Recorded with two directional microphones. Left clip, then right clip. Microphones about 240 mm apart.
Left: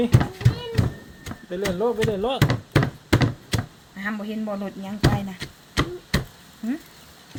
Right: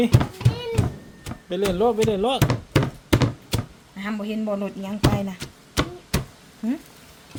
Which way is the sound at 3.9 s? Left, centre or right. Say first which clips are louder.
Even; centre.